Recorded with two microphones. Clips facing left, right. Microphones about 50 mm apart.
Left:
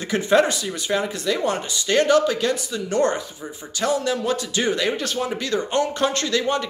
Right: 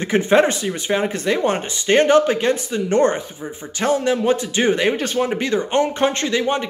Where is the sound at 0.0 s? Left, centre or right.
Right.